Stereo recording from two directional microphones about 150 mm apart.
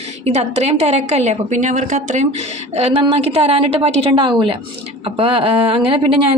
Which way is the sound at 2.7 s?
40° right (ahead or behind).